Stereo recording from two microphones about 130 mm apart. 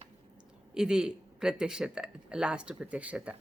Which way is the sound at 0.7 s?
5° right (ahead or behind).